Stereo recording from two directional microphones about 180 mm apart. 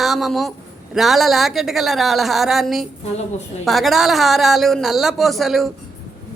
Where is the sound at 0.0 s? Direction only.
Centre (ahead or behind).